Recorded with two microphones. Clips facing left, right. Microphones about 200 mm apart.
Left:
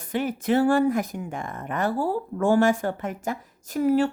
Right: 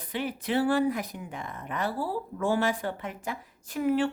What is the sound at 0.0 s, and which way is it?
A woman's voice, 45° left (ahead or behind).